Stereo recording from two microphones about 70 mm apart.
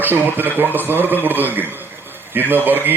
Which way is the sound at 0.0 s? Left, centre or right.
Right.